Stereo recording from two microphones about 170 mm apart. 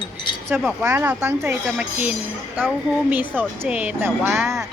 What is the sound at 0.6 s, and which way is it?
Speech, 5° right (ahead or behind).